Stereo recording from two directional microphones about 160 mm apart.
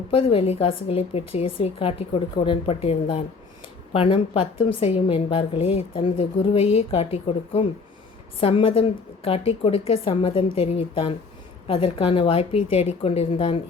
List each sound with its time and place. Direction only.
0.1 s a woman's voice: 35° left (ahead or behind)